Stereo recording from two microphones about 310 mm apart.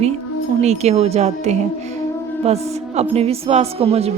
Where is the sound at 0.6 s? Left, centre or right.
Right.